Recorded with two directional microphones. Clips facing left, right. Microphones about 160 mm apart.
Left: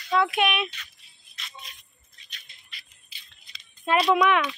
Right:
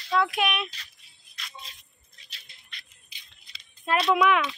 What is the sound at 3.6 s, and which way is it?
Speech, centre (ahead or behind).